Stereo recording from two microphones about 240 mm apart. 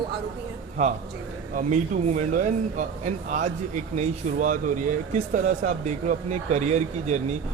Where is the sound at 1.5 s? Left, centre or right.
Right.